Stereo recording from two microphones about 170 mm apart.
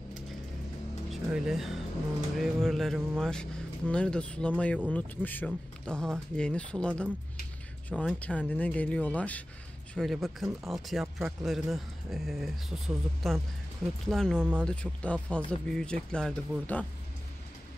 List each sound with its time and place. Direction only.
1.1 s speech: centre (ahead or behind)
8.2 s speech: 10° left (ahead or behind)